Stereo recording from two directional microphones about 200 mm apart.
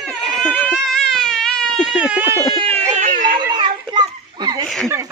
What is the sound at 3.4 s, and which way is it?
Children playing, 20° right (ahead or behind).